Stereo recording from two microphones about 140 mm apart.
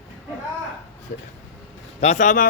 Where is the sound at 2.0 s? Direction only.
55° left (ahead or behind); by 2.5 s 70° left (ahead or behind).